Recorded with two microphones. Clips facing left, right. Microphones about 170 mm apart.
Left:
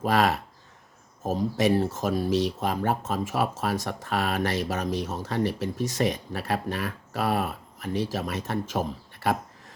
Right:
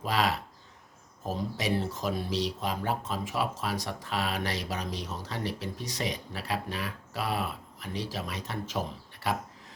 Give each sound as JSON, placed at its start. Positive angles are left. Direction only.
{"t": 0.0, "sound": "speech", "side_deg": 50}